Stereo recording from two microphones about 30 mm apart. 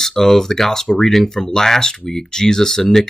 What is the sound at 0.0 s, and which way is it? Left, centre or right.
Speech, centre.